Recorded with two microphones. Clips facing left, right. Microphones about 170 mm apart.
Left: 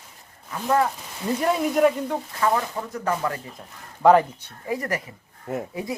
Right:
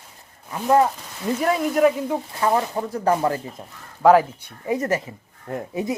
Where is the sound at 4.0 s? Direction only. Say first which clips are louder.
Right 1 dB; 5° right (ahead or behind).